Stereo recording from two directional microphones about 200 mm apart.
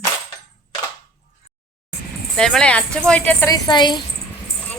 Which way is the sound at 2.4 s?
5° left (ahead or behind).